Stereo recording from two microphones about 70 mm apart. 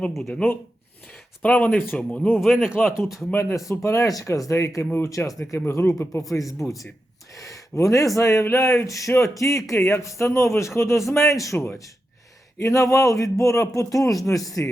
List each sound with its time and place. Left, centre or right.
0.1 s speech: centre
1.4 s speech: left
2.4 s speech: centre
3.8 s speech: left
4.1 s speech: left
5.5 s speech: left
6.3 s speech: left
11.5 s speech: left
12.5 s speech: left